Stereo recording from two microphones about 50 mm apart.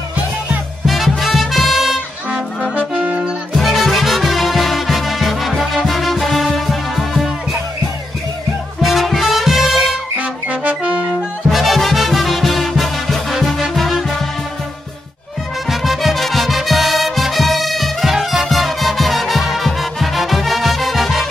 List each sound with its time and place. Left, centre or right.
0.8 s music: centre
2.6 s brass instrument: left
3.2 s music: centre
8.8 s music: centre
10.1 s music: right
11.5 s music: centre
15.7 s music: centre